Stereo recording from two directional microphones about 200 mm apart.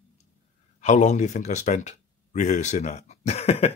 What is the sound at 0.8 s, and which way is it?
Speech, 35° left (ahead or behind).